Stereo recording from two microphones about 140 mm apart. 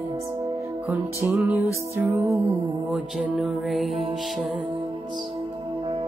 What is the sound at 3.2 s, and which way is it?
Speech, centre (ahead or behind).